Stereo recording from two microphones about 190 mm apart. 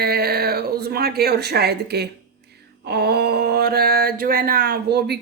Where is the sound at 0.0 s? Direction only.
55° right (ahead or behind).